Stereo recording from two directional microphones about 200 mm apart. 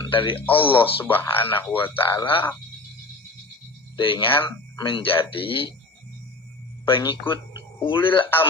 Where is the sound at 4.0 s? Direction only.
25° left (ahead or behind).